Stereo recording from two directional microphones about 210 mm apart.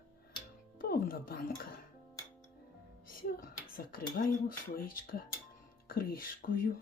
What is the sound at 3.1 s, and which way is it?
Music, 45° left (ahead or behind).